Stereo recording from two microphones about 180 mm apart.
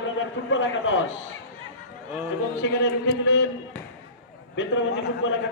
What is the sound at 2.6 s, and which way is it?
Speech, 70° left (ahead or behind).